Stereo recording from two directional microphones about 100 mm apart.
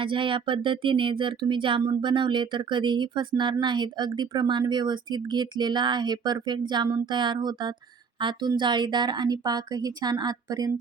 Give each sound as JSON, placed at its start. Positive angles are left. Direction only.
{"t": 0.0, "sound": "speech", "side_deg": -60}